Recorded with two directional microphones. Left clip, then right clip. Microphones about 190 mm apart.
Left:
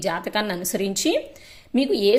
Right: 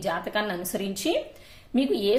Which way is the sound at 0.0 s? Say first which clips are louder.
Left 3 dB; 35° left (ahead or behind).